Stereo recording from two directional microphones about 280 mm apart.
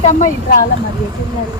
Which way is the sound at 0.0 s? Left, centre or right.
Left.